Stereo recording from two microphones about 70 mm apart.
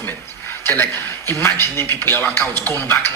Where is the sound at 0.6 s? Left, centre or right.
Left.